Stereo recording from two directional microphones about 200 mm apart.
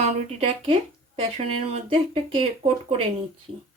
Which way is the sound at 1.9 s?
25° right (ahead or behind).